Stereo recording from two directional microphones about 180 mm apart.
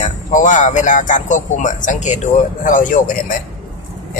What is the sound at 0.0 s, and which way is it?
Speech, 45° left (ahead or behind).